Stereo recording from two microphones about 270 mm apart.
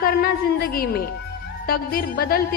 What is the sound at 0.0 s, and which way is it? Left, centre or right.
A woman's voice, left.